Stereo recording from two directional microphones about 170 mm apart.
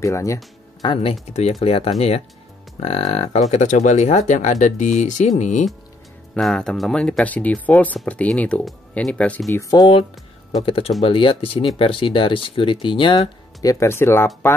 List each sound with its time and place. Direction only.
0.0 s speech: 20° left (ahead or behind)
0.8 s speech: 35° left (ahead or behind)
6.3 s speech: 5° left (ahead or behind); by 13.3 s 30° left (ahead or behind)
13.6 s speech: 20° left (ahead or behind)